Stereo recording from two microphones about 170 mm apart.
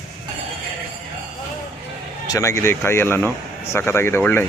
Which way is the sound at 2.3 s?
15° left (ahead or behind).